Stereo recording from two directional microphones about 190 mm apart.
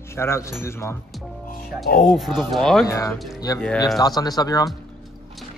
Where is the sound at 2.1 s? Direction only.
Centre (ahead or behind).